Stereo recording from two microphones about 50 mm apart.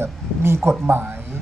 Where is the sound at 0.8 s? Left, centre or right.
Right.